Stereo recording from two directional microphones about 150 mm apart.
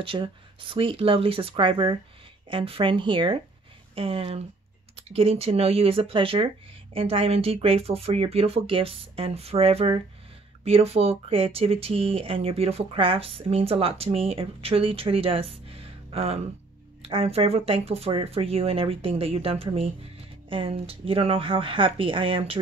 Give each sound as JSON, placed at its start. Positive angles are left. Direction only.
{"t": 0.0, "sound": "speech", "side_deg": -35}